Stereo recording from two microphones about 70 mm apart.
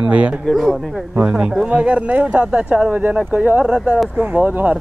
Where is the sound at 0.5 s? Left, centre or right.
Centre.